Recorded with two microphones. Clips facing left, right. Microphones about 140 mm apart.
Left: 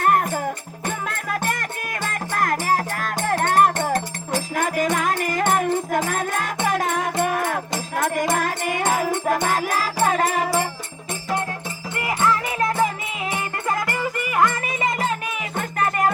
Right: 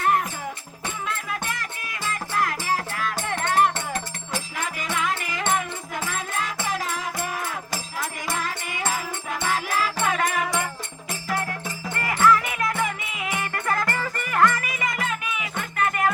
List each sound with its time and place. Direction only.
0.0 s music: 50° left (ahead or behind); by 10.7 s 35° left (ahead or behind)
11.9 s music: 20° left (ahead or behind)
13.3 s music: 20° left (ahead or behind); by 16.0 s 40° left (ahead or behind)